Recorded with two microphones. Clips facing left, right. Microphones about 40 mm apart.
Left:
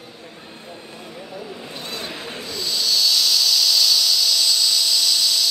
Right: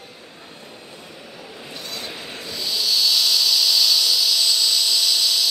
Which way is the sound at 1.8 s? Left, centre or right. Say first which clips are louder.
Left 1 dB; left.